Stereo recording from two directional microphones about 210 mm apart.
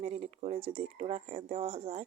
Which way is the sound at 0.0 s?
30° right (ahead or behind).